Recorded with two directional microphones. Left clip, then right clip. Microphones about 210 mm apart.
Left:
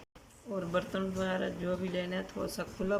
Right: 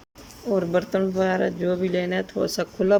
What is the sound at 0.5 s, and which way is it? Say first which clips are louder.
Speech: right 11 dB; 35° right (ahead or behind).